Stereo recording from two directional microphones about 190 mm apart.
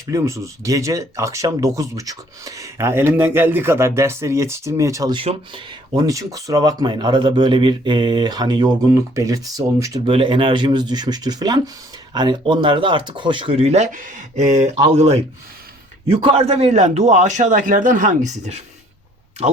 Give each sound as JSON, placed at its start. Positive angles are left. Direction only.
{"t": 0.1, "sound": "speech", "side_deg": -15}
{"t": 10.1, "sound": "a man's voice", "side_deg": -30}